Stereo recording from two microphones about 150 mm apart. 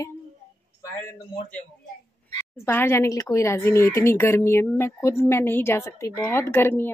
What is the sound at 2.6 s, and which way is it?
A woman's voice, 15° left (ahead or behind).